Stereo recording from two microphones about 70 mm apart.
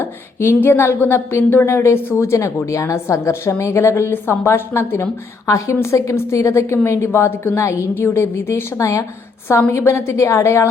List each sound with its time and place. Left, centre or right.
0.0 s a woman's voice: left
7.9 s a woman's voice: left